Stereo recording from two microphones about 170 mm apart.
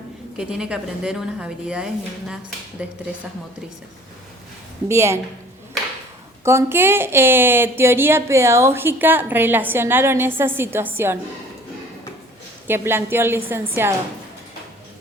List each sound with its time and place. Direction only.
0.3 s a woman's voice: 5° right (ahead or behind)
4.9 s speech: 15° right (ahead or behind)
6.4 s speech: 15° right (ahead or behind)
12.6 s speech: 15° right (ahead or behind)